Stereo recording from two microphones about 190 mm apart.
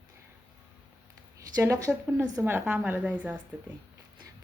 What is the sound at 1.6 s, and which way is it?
A woman's voice, 15° right (ahead or behind).